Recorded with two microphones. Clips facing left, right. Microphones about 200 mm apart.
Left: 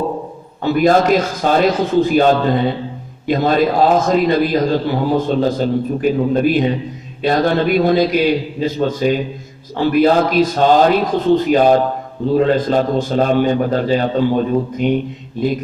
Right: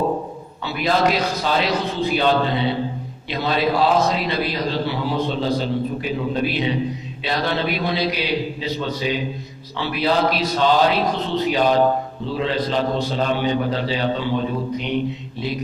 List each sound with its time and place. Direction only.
0.6 s a man's voice: 45° left (ahead or behind)